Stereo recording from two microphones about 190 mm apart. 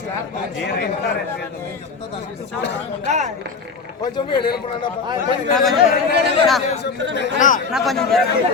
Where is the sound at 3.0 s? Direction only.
35° right (ahead or behind).